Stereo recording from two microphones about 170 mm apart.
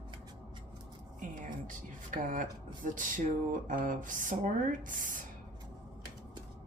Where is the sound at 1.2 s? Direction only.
50° right (ahead or behind).